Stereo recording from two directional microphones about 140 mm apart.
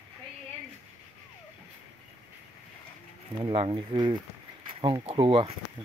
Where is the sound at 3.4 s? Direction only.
35° right (ahead or behind).